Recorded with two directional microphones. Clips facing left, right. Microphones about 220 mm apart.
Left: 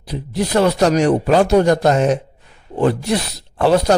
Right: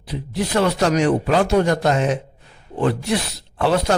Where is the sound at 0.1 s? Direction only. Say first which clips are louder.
Left 3 dB; 40° left (ahead or behind).